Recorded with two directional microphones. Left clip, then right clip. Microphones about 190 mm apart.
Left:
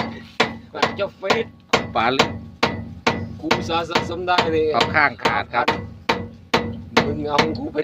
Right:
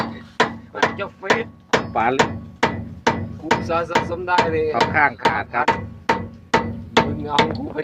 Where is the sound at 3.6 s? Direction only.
50° left (ahead or behind).